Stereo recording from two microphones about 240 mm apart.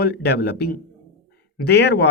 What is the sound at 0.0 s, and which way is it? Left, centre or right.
Speech, left.